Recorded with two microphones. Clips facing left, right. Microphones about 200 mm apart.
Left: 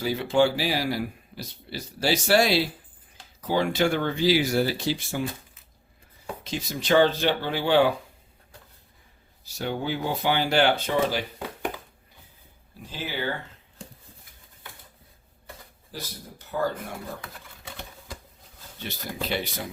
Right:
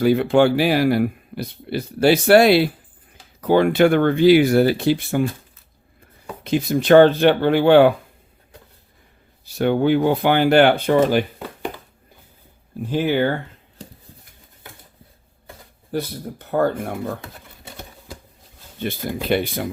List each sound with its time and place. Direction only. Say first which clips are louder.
0.0 s speech: right 7 dB; 60° right (ahead or behind)
6.4 s speech: right 14 dB; 55° right (ahead or behind)
9.4 s speech: right 12 dB; 60° right (ahead or behind)
12.8 s speech: right 13 dB; 60° right (ahead or behind)
15.9 s speech: right 14 dB; 60° right (ahead or behind)
18.8 s speech: right 8 dB; 55° right (ahead or behind)